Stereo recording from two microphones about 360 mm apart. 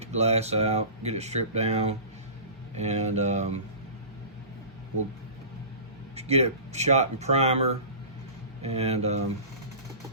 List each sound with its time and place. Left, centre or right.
0.0 s speech: centre
6.1 s speech: centre